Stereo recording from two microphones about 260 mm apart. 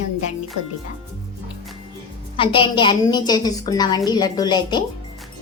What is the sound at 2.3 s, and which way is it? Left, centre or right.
A woman's voice, centre.